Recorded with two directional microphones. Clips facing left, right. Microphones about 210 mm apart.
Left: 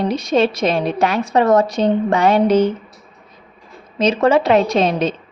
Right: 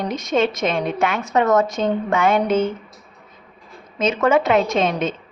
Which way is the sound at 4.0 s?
35° left (ahead or behind).